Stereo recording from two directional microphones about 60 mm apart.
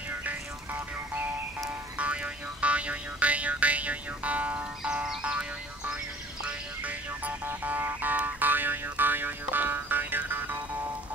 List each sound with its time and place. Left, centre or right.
0.2 s music: right
7.4 s a sound: right
7.8 s music: right